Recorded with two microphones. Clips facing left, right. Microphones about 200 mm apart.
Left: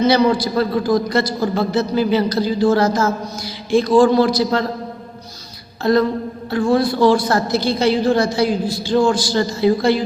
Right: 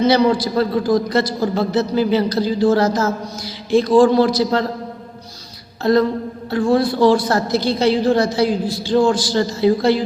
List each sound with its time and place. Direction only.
0.1 s a woman's voice: 35° right (ahead or behind)
5.8 s a woman's voice: 35° right (ahead or behind)